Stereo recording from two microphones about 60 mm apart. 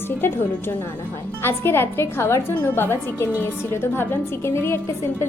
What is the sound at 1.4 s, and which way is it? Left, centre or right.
A woman's voice, left.